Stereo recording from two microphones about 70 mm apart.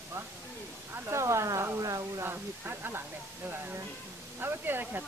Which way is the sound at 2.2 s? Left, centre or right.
Right.